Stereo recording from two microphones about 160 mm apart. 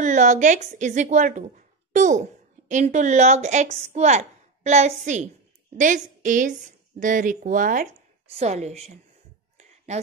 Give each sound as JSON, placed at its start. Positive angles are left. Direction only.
{"t": 0.0, "sound": "a woman's voice", "side_deg": -50}
{"t": 8.4, "sound": "a woman's voice", "side_deg": -45}